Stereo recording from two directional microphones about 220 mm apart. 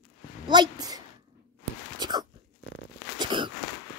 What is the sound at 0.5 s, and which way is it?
Speech, 20° right (ahead or behind).